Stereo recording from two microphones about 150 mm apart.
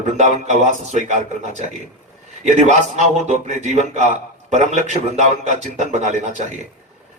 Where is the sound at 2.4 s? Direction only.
50° right (ahead or behind).